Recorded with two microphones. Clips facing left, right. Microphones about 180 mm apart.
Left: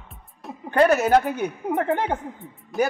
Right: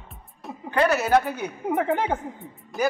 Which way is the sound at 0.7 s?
45° left (ahead or behind).